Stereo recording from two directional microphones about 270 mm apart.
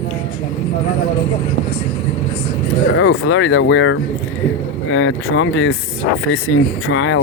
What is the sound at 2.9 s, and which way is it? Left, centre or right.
Speech, left.